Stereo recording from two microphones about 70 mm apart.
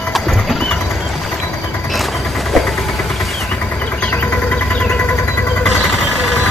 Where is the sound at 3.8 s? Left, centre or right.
Left.